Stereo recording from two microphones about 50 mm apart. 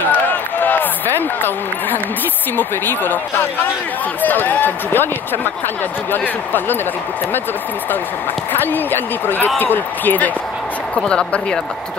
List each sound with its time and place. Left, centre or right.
0.1 s a sound: left
2.5 s speech: left
8.5 s speech: left
11.0 s speech: centre